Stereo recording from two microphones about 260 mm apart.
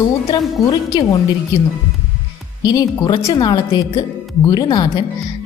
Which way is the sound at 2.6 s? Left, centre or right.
Centre.